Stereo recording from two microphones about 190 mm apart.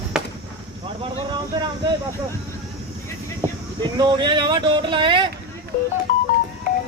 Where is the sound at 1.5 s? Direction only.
25° right (ahead or behind).